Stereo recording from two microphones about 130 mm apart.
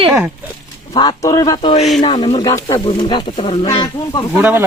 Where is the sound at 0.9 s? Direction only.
30° left (ahead or behind).